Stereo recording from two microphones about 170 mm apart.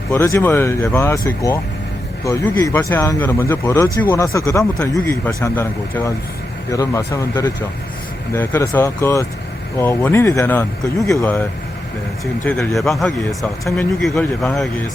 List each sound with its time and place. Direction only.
0.1 s speech: 15° left (ahead or behind)
12.7 s a man's voice: centre (ahead or behind)